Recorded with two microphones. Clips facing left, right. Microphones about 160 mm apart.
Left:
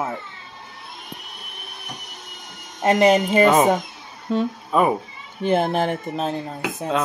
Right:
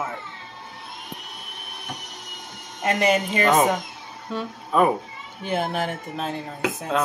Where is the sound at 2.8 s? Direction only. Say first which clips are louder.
Left 6 dB; 35° left (ahead or behind).